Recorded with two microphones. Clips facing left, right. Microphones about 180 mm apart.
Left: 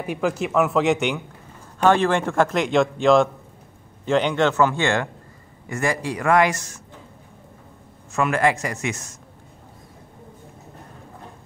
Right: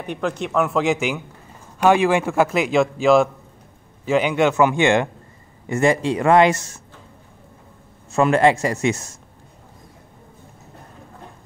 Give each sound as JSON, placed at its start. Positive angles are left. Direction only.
{"t": 0.0, "sound": "a man's voice", "side_deg": 5}
{"t": 8.1, "sound": "speech", "side_deg": -30}